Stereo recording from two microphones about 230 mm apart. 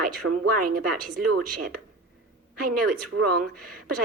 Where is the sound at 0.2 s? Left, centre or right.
Right.